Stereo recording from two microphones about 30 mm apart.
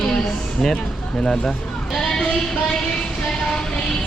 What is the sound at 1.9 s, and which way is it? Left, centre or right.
Bleat, centre.